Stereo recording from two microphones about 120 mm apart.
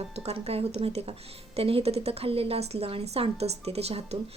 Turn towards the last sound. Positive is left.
turn(degrees=-60)  # may be behind; listen again after turning